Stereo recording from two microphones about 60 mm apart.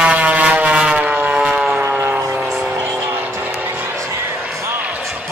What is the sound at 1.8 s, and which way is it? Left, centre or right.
Vehicle, right.